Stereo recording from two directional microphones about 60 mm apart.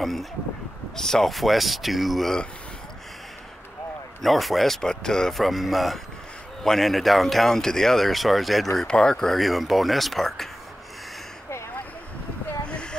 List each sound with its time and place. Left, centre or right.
0.0 s speech: centre
4.2 s speech: centre
5.5 s speech: centre
8.8 s speech: centre
12.6 s a sound: centre